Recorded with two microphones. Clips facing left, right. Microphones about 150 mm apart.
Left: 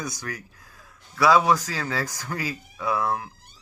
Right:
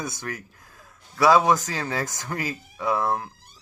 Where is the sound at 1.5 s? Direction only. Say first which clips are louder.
Even; 45° right (ahead or behind).